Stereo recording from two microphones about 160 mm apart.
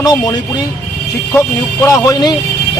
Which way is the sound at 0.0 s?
25° left (ahead or behind).